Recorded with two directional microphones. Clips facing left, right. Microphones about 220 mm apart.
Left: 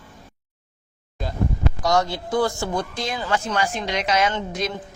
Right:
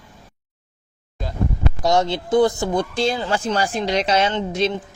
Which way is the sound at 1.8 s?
25° right (ahead or behind).